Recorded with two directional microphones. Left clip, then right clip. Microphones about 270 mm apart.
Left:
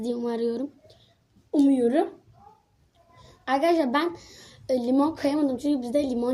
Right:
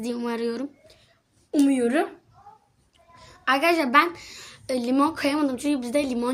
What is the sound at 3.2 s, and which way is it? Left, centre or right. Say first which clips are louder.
A woman's voice: right 2 dB; centre.